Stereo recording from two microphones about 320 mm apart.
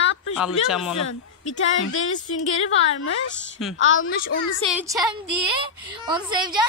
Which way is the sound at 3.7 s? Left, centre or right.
Left.